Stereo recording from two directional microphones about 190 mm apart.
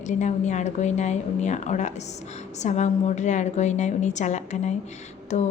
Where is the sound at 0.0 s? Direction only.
40° left (ahead or behind).